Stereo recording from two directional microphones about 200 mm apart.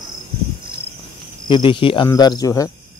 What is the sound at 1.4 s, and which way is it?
Speech, 25° left (ahead or behind).